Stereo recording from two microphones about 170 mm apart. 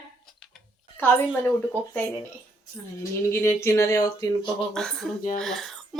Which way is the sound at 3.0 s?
15° left (ahead or behind).